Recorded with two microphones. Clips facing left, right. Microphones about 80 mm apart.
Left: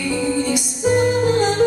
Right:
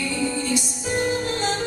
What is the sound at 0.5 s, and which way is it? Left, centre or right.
Music, centre.